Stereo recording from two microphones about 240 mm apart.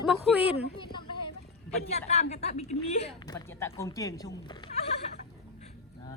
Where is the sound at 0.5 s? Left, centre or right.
Centre.